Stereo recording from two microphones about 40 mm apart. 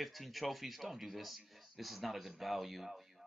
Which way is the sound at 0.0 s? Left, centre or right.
Centre.